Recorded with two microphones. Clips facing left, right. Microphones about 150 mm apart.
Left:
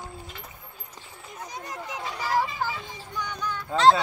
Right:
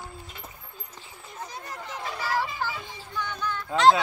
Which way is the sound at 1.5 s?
15° left (ahead or behind).